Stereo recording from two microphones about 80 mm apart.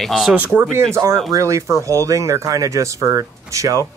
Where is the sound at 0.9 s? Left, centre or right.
Right.